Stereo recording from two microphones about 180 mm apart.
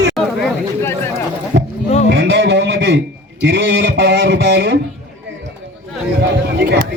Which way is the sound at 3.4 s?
80° right.